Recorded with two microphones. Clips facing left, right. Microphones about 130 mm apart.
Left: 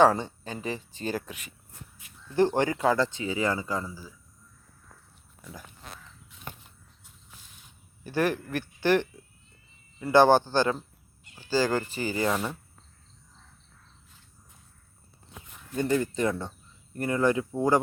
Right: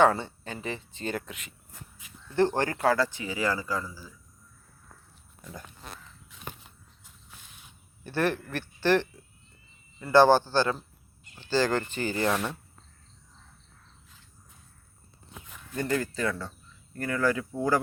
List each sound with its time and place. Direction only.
0.1 s speech: 15° left (ahead or behind)
2.3 s speech: 15° left (ahead or behind)
5.4 s speech: 5° left (ahead or behind)
6.3 s a sound: 90° right
7.0 s a sound: 70° right (ahead or behind)
8.0 s speech: 10° left (ahead or behind)
15.7 s speech: 20° left (ahead or behind)